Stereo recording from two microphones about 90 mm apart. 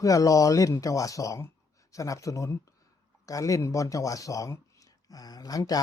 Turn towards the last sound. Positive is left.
turn(degrees=45)  # may be behind; listen again after turning